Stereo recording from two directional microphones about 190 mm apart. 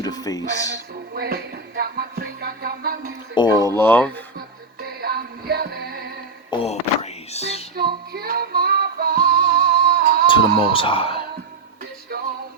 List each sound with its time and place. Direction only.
0.0 s speech: 20° left (ahead or behind)
1.1 s music: 55° right (ahead or behind)
3.3 s speech: 25° left (ahead or behind)
4.4 s music: 55° right (ahead or behind)
6.5 s a sound: 30° left (ahead or behind)
7.8 s music: 55° right (ahead or behind)
10.2 s speech: 25° left (ahead or behind)